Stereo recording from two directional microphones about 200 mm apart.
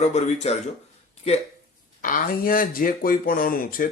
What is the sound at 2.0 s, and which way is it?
Speech, 45° left (ahead or behind).